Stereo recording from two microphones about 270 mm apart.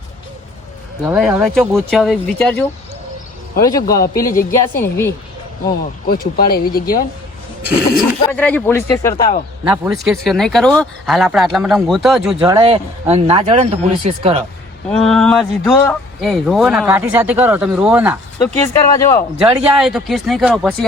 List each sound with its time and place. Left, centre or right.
1.0 s speech: centre
6.1 s speech: left
8.2 s speech: centre
9.6 s speech: centre
12.4 s speech: centre
14.8 s speech: centre
18.5 s speech: centre
19.4 s speech: centre